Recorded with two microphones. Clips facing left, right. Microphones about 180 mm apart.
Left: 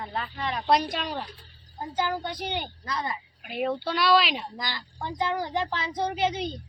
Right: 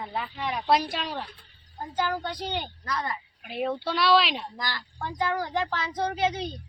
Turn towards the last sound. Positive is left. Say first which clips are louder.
# even
turn(degrees=15)  # may be behind; listen again after turning